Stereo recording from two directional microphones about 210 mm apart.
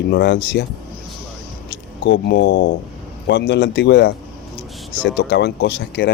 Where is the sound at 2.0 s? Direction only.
55° left (ahead or behind).